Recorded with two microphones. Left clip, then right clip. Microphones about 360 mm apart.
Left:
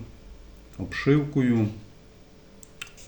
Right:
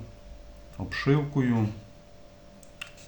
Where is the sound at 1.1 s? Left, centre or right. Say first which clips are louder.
Left 4 dB; centre.